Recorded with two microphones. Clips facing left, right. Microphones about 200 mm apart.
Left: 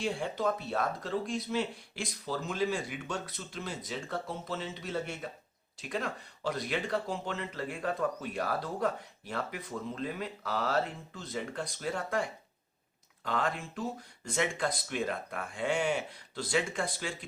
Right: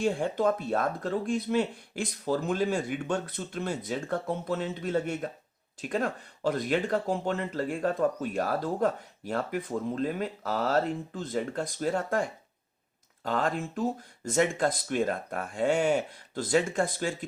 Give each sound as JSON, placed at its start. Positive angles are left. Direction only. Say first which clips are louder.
{"t": 0.0, "sound": "speech", "louder": "right 6 dB", "side_deg": -50}